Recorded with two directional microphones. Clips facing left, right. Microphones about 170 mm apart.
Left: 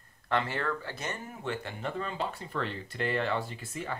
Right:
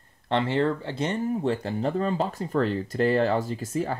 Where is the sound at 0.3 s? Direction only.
25° right (ahead or behind).